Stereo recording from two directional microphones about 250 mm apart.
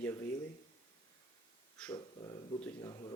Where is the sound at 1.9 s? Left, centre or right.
Centre.